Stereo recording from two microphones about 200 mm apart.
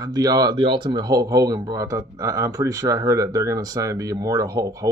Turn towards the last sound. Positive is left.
turn(degrees=-15)  # may be behind; listen again after turning